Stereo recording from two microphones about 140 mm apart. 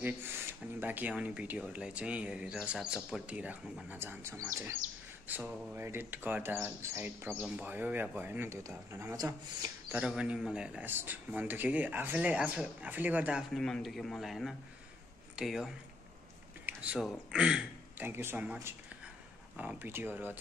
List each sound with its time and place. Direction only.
0.7 s speech: 10° right (ahead or behind)
9.8 s speech: 10° right (ahead or behind)
16.6 s a sound: 10° right (ahead or behind)
17.3 s speech: 5° right (ahead or behind)